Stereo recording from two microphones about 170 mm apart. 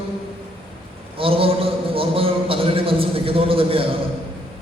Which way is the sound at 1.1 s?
35° right (ahead or behind).